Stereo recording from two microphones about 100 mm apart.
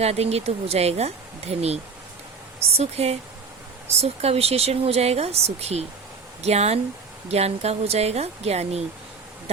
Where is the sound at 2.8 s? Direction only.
90° right.